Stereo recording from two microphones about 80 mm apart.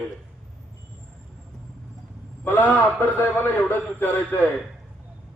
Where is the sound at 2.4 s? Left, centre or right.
Left.